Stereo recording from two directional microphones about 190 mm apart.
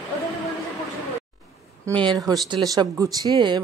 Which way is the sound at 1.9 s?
20° right (ahead or behind).